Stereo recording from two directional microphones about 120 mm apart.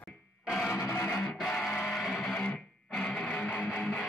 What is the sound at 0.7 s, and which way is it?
Music, 25° left (ahead or behind).